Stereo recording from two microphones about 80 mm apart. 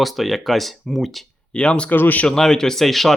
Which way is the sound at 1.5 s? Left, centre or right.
Centre.